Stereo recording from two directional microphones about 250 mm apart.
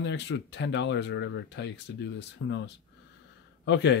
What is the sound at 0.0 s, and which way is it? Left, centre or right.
Speech, left.